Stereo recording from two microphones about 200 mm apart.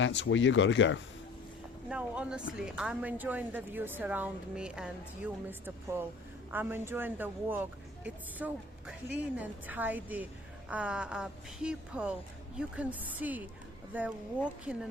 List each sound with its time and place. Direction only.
0.0 s speech: 65° left (ahead or behind)
1.9 s a woman's voice: 5° right (ahead or behind)